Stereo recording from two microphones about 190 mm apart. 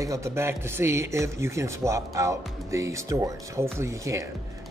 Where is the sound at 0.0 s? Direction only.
15° right (ahead or behind).